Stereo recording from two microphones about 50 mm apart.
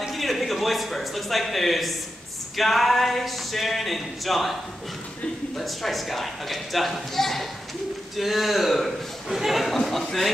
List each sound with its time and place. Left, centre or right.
0.0 s speech: centre
5.6 s speech: centre